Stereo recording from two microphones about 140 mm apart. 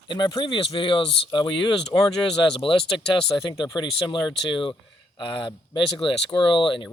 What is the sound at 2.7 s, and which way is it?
Speech, 40° left (ahead or behind).